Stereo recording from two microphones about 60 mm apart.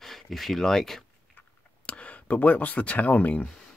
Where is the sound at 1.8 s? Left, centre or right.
Left.